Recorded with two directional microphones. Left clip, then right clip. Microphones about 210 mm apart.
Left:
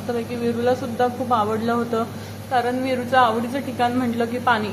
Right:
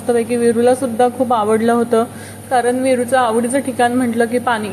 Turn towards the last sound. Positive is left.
turn(degrees=-20)  # may be behind; listen again after turning